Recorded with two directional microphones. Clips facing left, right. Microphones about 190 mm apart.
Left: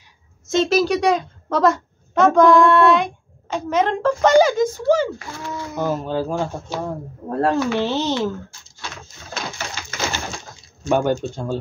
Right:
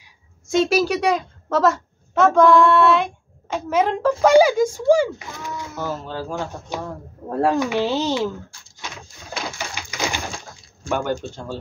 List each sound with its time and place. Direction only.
0.5 s a woman's voice: 10° right (ahead or behind)
5.7 s speech: 15° left (ahead or behind)
7.2 s speech: 5° right (ahead or behind)
9.3 s bird: 15° right (ahead or behind)
10.8 s speech: 20° left (ahead or behind)